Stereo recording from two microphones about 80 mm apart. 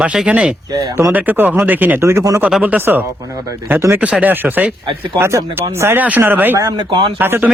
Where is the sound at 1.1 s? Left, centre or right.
Right.